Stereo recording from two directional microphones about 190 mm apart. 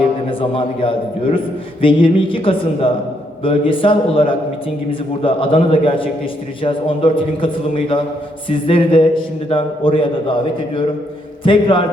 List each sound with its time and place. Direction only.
0.3 s a man's voice: 30° left (ahead or behind)
11.4 s a man's voice: 25° left (ahead or behind)